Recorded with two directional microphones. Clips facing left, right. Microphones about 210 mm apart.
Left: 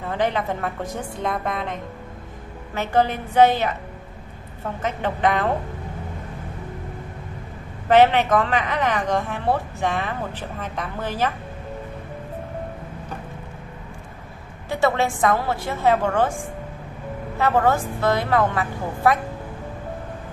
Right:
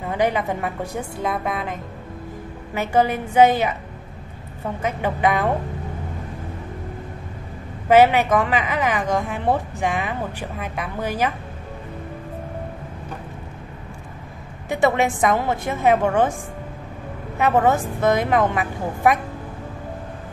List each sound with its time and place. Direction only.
0.0 s a woman's voice: 10° right (ahead or behind)
4.8 s a woman's voice: 10° right (ahead or behind)
7.9 s a woman's voice: 10° right (ahead or behind)
14.7 s a woman's voice: 20° right (ahead or behind)
17.4 s a woman's voice: 15° right (ahead or behind)